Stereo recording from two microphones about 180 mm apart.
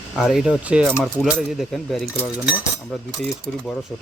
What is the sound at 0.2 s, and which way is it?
Speech, centre (ahead or behind).